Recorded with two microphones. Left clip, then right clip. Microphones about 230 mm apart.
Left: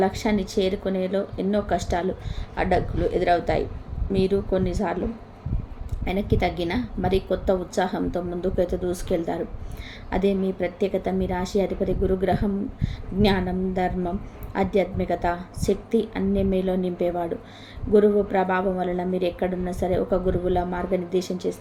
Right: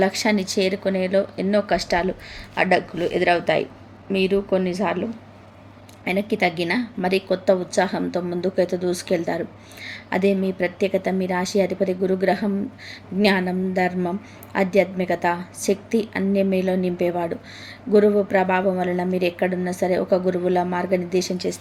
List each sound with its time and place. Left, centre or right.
0.0 s a woman's voice: centre
2.6 s a woman's voice: centre
6.3 s a woman's voice: centre